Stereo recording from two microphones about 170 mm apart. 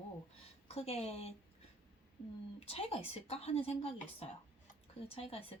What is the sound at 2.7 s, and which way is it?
Speech, 35° left (ahead or behind).